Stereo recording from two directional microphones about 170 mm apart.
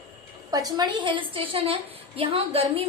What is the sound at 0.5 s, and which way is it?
A woman's voice, 20° right (ahead or behind).